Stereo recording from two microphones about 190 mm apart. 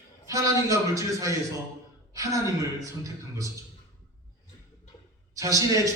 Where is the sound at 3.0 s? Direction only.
15° right (ahead or behind).